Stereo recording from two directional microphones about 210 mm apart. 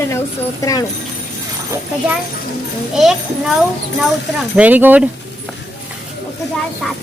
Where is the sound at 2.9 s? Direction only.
Centre (ahead or behind).